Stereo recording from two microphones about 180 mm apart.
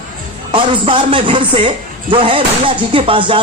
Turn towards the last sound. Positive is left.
turn(degrees=-30)  # may be behind; listen again after turning